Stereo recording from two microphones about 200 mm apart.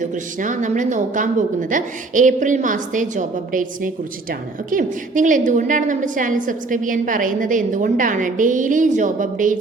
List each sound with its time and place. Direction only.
0.0 s a woman's voice: 40° right (ahead or behind)